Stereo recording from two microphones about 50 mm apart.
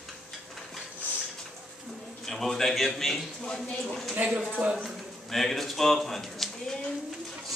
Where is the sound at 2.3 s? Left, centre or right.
Centre.